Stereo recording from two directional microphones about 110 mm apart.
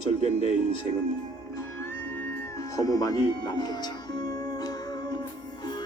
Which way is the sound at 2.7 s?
30° left (ahead or behind).